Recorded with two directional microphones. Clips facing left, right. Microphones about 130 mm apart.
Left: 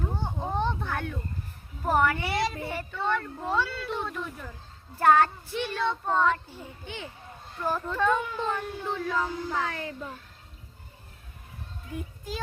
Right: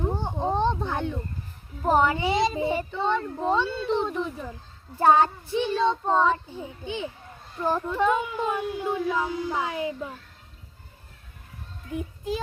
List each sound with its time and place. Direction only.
0.1 s a sound: 20° right (ahead or behind)
1.8 s a child's voice: 20° right (ahead or behind)
11.9 s a child's voice: 20° right (ahead or behind)